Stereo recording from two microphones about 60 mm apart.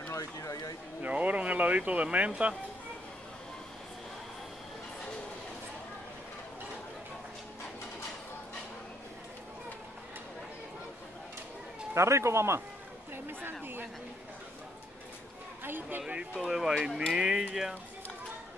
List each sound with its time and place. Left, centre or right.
0.1 s speech: left
1.0 s speech: right
11.9 s speech: right
13.1 s a sound: right
15.6 s a sound: right
16.3 s speech: centre
17.1 s music: centre